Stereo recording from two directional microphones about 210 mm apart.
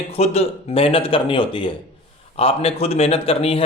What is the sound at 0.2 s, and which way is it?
Speech, 30° left (ahead or behind).